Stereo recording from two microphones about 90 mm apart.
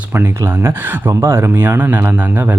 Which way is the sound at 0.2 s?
25° right (ahead or behind).